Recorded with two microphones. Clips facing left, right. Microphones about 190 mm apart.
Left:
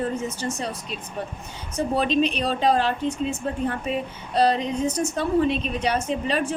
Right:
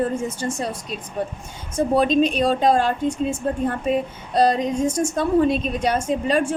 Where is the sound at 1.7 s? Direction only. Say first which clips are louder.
Right 4 dB; 45° right (ahead or behind).